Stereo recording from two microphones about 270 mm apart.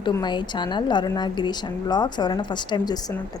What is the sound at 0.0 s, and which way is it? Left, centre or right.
A woman's voice, centre.